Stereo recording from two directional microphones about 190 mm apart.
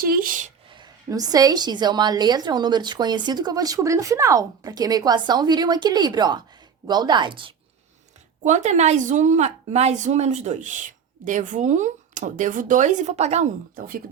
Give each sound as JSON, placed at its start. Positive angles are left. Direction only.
{"t": 0.0, "sound": "speech", "side_deg": -50}
{"t": 0.7, "sound": "a woman's voice", "side_deg": -20}
{"t": 8.4, "sound": "a woman's voice", "side_deg": -40}